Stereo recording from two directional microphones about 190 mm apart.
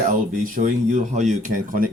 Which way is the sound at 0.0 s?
45° right (ahead or behind).